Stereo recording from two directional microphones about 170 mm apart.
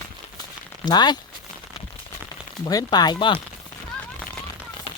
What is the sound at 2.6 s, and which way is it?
Speech, 25° left (ahead or behind).